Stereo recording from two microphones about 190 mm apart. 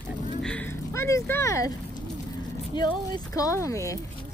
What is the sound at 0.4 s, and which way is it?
Vehicle, 5° left (ahead or behind).